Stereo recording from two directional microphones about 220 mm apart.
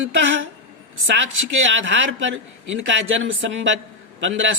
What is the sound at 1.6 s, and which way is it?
Speech, 55° right (ahead or behind).